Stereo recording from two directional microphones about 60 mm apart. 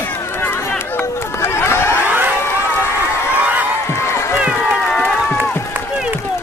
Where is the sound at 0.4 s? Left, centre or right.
Left.